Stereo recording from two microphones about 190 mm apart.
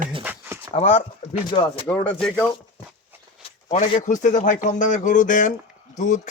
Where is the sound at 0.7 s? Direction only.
35° left (ahead or behind).